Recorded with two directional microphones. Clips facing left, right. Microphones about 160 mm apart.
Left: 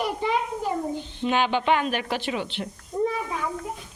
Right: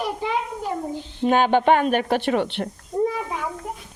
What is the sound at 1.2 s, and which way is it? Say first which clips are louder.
A woman's voice: right 6 dB; 45° right (ahead or behind).